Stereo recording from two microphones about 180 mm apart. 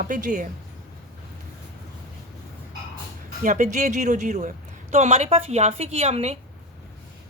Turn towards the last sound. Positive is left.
turn(degrees=-35)  # may be behind; listen again after turning